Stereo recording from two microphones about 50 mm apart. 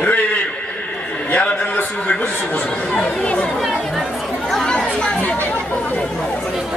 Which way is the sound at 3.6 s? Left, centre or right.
Centre.